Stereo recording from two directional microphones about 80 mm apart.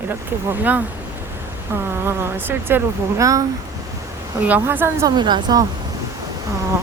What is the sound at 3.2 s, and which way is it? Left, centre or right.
Speech, right.